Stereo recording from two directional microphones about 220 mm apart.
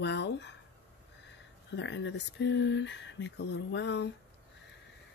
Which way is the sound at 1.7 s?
55° left (ahead or behind).